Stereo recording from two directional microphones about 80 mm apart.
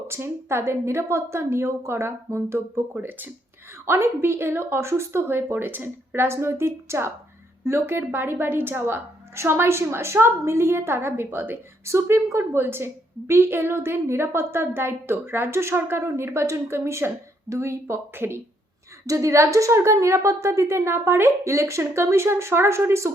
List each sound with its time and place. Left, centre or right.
0.1 s a woman's voice: right